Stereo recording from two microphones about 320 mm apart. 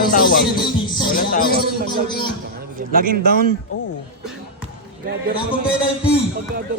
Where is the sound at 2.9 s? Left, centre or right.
Right.